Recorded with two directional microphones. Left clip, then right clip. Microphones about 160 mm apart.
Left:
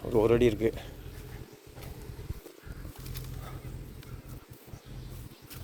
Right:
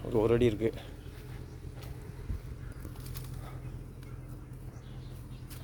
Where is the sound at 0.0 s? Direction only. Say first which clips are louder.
Left 3 dB; centre (ahead or behind).